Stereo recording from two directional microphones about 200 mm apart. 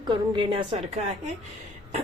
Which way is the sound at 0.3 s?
25° right (ahead or behind).